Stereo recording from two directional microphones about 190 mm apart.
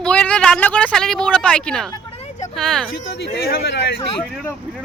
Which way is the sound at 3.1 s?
60° left (ahead or behind).